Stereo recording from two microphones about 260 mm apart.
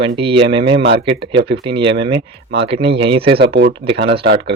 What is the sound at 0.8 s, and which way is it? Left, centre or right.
Speech, right.